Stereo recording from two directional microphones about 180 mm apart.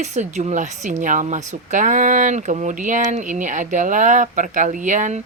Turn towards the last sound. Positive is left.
turn(degrees=-45)  # may be behind; listen again after turning